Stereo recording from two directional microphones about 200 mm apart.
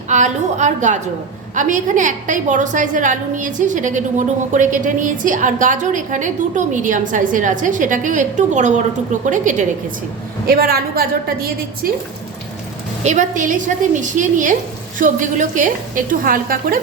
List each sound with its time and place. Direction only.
0.1 s a woman's voice: 35° right (ahead or behind)
13.0 s a woman's voice: 35° right (ahead or behind)